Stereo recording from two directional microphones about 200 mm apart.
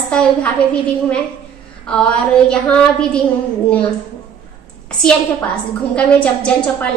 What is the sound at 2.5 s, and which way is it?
Speech, 5° left (ahead or behind).